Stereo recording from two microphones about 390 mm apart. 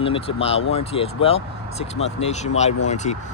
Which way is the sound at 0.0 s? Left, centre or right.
Centre.